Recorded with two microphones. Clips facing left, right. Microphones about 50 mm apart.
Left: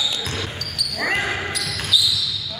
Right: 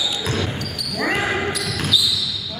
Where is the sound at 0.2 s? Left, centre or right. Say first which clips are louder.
Right 4 dB; centre.